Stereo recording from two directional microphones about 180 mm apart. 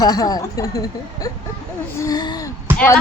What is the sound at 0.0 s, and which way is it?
A woman's voice, 20° left (ahead or behind).